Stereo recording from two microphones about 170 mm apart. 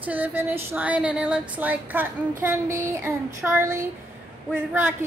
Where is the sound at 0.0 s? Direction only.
10° right (ahead or behind).